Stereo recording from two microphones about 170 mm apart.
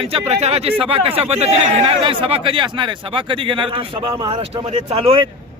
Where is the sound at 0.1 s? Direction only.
40° right (ahead or behind).